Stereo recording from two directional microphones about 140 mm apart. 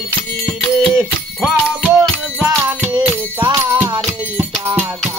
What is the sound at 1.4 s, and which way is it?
Music, 5° right (ahead or behind).